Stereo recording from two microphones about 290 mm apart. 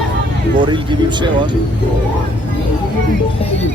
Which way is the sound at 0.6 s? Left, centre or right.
Centre.